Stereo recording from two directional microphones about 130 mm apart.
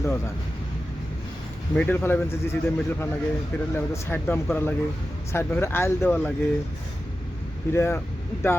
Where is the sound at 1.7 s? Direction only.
15° left (ahead or behind).